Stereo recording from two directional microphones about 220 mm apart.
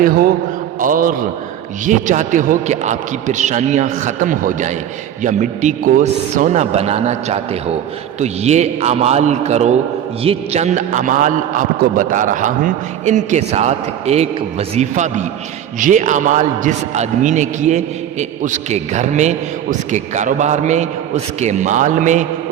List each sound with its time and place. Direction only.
0.0 s a man's voice: 40° right (ahead or behind)